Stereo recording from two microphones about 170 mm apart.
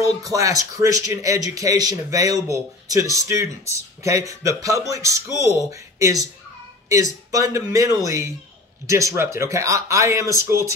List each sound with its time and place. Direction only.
0.3 s a man's voice: 20° right (ahead or behind)